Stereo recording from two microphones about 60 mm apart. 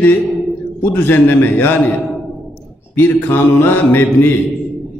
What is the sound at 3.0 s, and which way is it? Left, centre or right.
Music, left.